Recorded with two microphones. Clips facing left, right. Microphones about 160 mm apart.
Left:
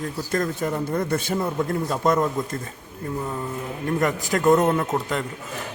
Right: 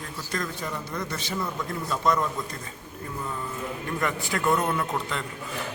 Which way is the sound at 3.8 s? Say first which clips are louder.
Left 7 dB; 40° left (ahead or behind).